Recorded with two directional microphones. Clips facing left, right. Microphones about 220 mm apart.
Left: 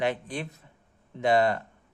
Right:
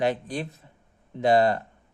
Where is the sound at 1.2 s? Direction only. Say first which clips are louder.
Right 3 dB; 35° right (ahead or behind).